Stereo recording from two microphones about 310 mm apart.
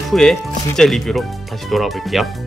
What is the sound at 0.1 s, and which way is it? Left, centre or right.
Speech, centre.